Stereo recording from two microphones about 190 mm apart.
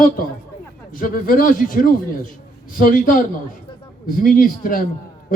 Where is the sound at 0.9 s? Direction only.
45° left (ahead or behind).